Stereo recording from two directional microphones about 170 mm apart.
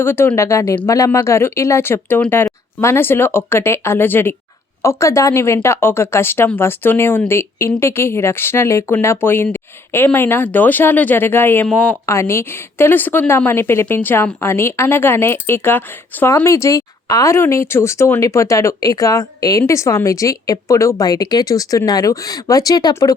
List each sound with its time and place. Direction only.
0.0 s speech: 15° left (ahead or behind)